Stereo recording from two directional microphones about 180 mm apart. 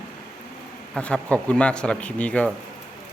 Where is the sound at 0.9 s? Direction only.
5° left (ahead or behind).